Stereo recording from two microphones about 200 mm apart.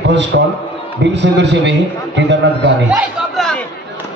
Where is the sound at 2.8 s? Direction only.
5° right (ahead or behind).